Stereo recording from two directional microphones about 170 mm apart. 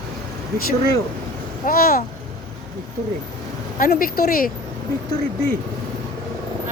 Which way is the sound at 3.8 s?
60° left (ahead or behind).